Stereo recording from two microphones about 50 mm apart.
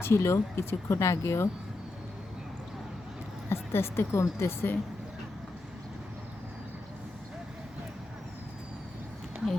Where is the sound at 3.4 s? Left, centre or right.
Left.